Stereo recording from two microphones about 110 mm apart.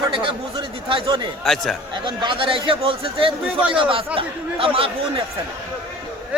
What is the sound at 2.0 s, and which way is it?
Speech, 45° right (ahead or behind).